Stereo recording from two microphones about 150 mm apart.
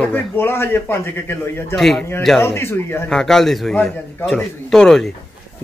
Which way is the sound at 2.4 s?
15° left (ahead or behind).